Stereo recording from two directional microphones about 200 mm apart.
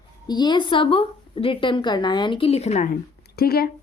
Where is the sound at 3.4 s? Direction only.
50° left (ahead or behind).